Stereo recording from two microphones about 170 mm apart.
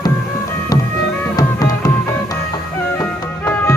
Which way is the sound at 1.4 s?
20° left (ahead or behind).